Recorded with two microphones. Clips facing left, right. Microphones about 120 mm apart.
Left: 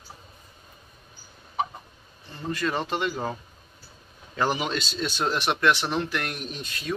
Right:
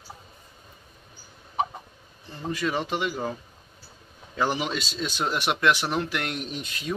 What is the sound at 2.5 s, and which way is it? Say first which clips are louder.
Speech: even; 10° right (ahead or behind).